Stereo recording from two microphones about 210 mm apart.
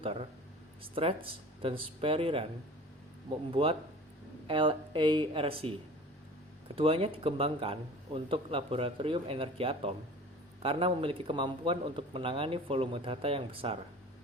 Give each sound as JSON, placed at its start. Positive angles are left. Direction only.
{"t": 0.8, "sound": "a man's voice", "side_deg": -25}
{"t": 3.5, "sound": "a man's voice", "side_deg": -25}
{"t": 6.7, "sound": "a man's voice", "side_deg": -25}